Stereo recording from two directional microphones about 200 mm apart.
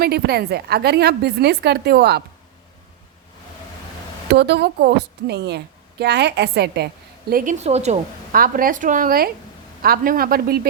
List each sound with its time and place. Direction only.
0.0 s a woman's voice: 50° right (ahead or behind)
4.3 s a woman's voice: 55° right (ahead or behind)
7.6 s a woman's voice: 35° right (ahead or behind); by 10.7 s 50° right (ahead or behind)